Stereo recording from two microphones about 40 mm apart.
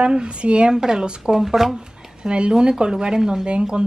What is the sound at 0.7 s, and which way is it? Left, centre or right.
Speech, centre.